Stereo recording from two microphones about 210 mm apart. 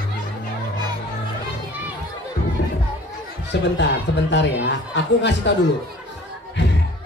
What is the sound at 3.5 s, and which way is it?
A woman's voice, 55° left (ahead or behind).